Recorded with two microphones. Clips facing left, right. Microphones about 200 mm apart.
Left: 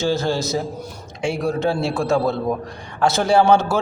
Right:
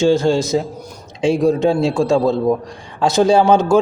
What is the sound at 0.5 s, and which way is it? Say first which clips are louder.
A man's voice: right 5 dB; 20° right (ahead or behind).